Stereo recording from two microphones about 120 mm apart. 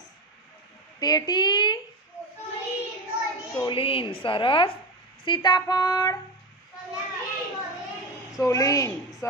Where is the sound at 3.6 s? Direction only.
45° left (ahead or behind).